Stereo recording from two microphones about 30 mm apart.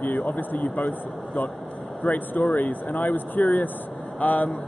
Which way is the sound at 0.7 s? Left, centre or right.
Left.